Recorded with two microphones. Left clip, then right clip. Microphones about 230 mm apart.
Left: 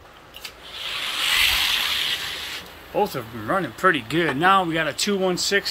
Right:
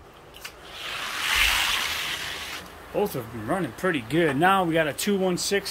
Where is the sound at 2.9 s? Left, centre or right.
Centre.